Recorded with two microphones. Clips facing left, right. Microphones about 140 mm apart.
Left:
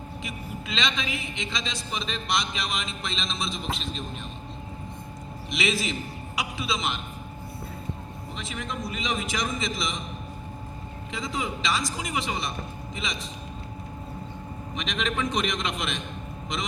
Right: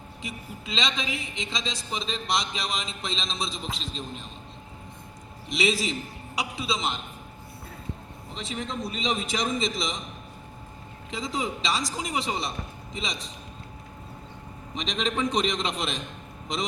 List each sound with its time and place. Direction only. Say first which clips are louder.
0.2 s a man's voice: left 1 dB; 30° right (ahead or behind)
5.5 s a man's voice: right 2 dB; 35° right (ahead or behind)
8.4 s a man's voice: right 2 dB; 30° right (ahead or behind)
11.1 s a man's voice: right 1 dB; 35° right (ahead or behind)
14.8 s a man's voice: right 1 dB; 35° right (ahead or behind)